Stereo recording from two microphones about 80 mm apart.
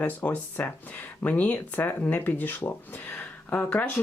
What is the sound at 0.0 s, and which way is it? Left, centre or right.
Speech, left.